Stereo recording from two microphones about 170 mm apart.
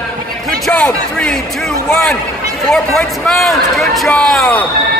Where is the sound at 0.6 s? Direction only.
5° left (ahead or behind).